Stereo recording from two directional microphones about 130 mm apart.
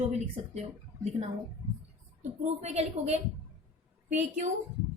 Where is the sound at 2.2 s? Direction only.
60° right (ahead or behind).